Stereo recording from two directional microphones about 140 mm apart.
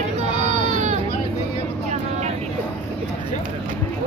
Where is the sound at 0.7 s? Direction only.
60° right (ahead or behind).